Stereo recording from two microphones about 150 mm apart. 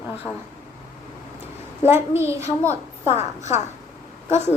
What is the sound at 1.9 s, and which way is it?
Speech, 15° right (ahead or behind).